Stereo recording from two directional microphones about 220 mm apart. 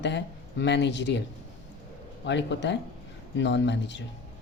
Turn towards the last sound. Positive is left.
turn(degrees=55)  # may be behind; listen again after turning